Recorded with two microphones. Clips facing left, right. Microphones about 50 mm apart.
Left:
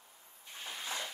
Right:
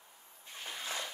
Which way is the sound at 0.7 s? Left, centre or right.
Right.